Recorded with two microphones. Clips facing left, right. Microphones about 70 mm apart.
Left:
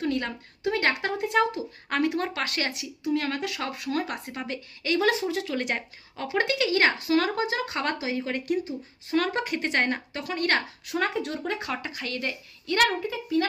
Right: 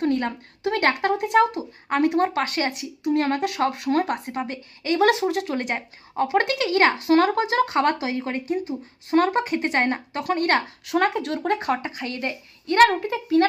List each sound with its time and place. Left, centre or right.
0.0 s a woman's voice: right
3.8 s speech: right
4.4 s a woman's voice: right
4.9 s a woman's voice: right
10.1 s speech: right
10.9 s a woman's voice: right
13.1 s speech: right